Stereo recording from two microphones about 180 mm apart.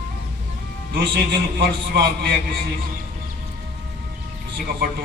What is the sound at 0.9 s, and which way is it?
A man's voice, 55° right (ahead or behind).